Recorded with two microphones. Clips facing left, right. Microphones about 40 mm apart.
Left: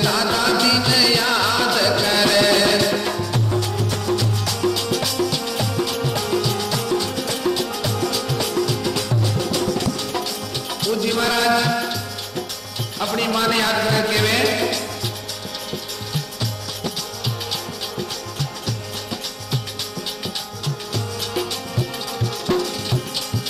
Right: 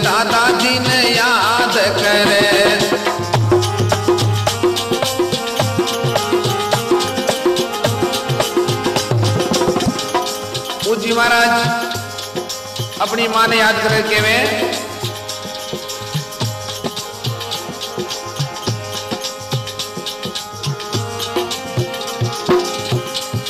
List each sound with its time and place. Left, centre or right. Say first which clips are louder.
0.0 s music: right 6 dB; right
1.3 s music: right 5 dB; right
1.7 s music: right 4 dB; right
2.1 s music: right 4 dB; right
13.2 s a man's voice: right 7 dB; right
13.8 s speech: right 4 dB; right
14.1 s music: right 4 dB; right
15.7 s music: right 2 dB; right
22.5 s music: right 7 dB; right